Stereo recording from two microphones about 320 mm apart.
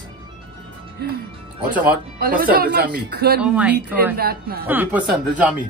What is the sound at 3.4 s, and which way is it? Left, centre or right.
Speech, centre.